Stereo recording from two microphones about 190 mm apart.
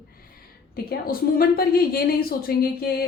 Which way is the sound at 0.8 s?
50° left (ahead or behind).